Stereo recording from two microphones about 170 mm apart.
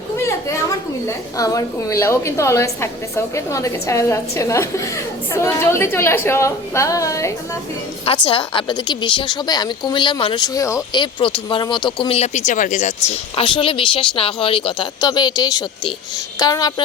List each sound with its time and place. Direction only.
0.3 s a woman's voice: 15° left (ahead or behind)
8.0 s a woman's voice: 30° left (ahead or behind); by 12.9 s 45° left (ahead or behind)
13.1 s a woman's voice: 30° left (ahead or behind)